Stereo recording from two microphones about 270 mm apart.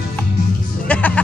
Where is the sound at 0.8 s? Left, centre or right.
Centre.